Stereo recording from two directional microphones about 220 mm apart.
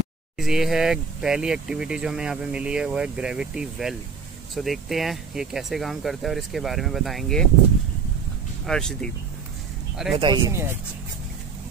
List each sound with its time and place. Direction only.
0.4 s speech: centre (ahead or behind)
8.6 s speech: 5° left (ahead or behind)
10.1 s speech: 20° right (ahead or behind)